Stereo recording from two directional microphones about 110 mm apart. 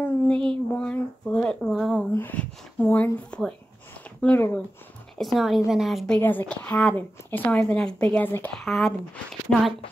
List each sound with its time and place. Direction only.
0.0 s a sound: 5° left (ahead or behind)
2.1 s a woman's voice: 15° left (ahead or behind)
5.1 s speech: centre (ahead or behind)
6.1 s a woman's voice: 15° left (ahead or behind)